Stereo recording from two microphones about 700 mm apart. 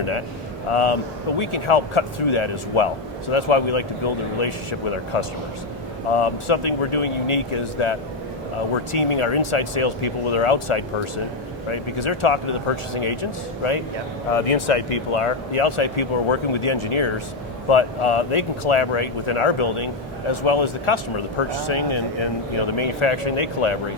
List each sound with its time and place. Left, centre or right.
0.7 s speech: left
6.1 s speech: left
14.3 s speech: left